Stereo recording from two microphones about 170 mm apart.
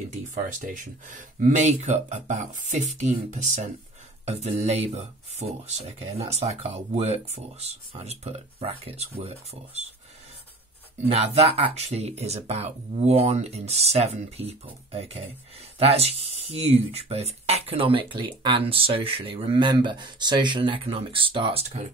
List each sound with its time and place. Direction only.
0.1 s speech: 50° right (ahead or behind)
11.1 s speech: 35° right (ahead or behind)